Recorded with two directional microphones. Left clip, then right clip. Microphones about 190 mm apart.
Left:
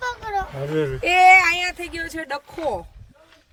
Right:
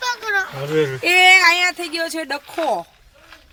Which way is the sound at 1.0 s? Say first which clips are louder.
Right 1 dB; 40° right (ahead or behind).